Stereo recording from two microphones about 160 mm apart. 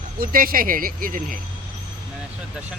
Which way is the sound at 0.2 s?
65° right (ahead or behind).